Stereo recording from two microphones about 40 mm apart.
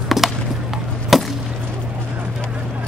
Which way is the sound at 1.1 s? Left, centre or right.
Centre.